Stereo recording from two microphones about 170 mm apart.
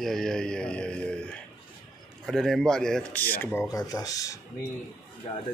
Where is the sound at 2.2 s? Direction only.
Centre (ahead or behind); by 4.4 s 20° left (ahead or behind).